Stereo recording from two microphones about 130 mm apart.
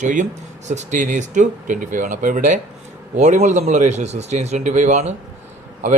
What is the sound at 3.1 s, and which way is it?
A man's voice, 65° right (ahead or behind).